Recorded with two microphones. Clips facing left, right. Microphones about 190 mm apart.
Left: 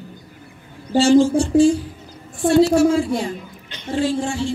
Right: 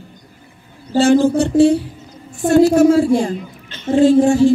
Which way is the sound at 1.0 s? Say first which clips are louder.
Right 2 dB; 55° right (ahead or behind).